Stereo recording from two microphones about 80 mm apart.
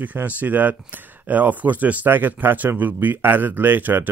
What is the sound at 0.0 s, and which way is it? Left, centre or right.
Speech, right.